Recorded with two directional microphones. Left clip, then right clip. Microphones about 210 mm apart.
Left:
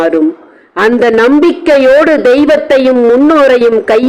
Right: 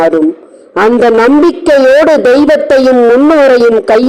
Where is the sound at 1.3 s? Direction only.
15° right (ahead or behind).